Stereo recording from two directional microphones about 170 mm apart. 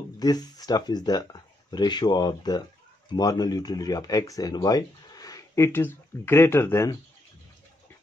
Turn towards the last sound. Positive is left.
turn(degrees=15)  # may be behind; listen again after turning